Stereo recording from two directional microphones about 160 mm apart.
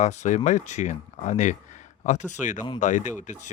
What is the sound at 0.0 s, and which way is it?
Speech, 45° left (ahead or behind).